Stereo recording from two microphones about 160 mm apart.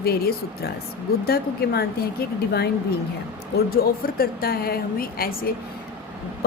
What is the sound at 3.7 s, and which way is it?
A woman's voice, 65° left (ahead or behind).